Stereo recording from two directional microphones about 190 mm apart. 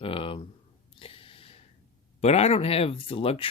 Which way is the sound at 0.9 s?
30° left (ahead or behind).